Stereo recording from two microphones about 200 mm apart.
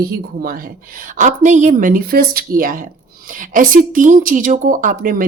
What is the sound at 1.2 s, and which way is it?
Speech, 40° right (ahead or behind).